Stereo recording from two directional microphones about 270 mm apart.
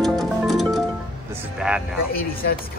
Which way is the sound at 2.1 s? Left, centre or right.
Left.